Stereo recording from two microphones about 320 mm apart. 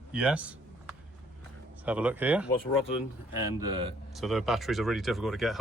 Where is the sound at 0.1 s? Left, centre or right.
Centre.